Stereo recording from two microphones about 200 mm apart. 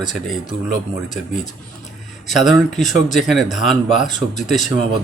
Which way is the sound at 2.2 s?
Centre (ahead or behind).